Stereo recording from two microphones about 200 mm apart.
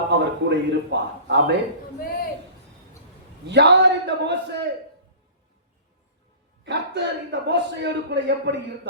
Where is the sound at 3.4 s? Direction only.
60° right (ahead or behind).